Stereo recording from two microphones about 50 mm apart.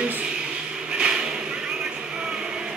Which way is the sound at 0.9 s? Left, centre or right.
Centre.